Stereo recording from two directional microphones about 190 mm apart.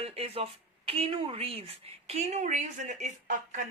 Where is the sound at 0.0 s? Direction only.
30° right (ahead or behind).